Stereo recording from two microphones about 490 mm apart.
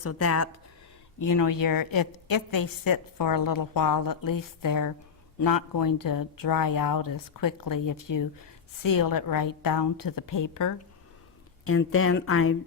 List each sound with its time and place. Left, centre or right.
0.0 s a woman's voice: left
11.6 s speech: left